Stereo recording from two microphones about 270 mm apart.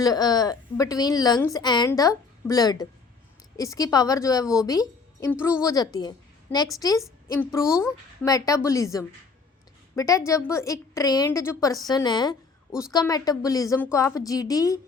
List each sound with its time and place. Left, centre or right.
0.0 s a woman's voice: centre